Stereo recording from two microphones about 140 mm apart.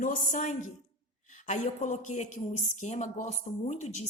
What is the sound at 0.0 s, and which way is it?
A woman's voice, 65° left (ahead or behind).